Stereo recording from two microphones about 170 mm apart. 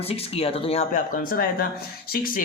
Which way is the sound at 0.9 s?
50° left (ahead or behind).